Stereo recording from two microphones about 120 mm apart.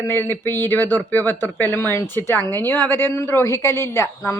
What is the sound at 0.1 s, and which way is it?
Speech, 15° left (ahead or behind).